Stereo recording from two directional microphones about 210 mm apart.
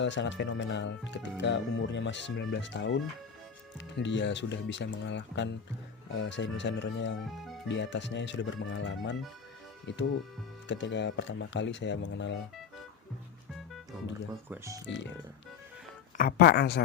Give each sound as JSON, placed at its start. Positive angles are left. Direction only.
{"t": 0.0, "sound": "speech", "side_deg": 60}
{"t": 7.3, "sound": "speech", "side_deg": 0}
{"t": 7.7, "sound": "speech", "side_deg": 60}
{"t": 14.5, "sound": "speech", "side_deg": -15}
{"t": 14.8, "sound": "speech", "side_deg": 60}
{"t": 16.1, "sound": "speech", "side_deg": 45}